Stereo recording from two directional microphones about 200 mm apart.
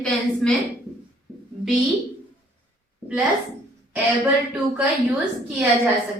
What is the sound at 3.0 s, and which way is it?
Speech, 5° right (ahead or behind).